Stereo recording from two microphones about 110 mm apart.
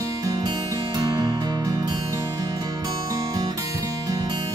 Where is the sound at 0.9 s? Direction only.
40° right (ahead or behind).